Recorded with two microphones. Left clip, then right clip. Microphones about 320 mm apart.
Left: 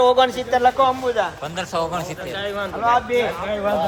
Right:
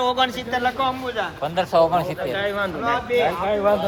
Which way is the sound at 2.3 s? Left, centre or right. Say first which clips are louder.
Right 1 dB; centre.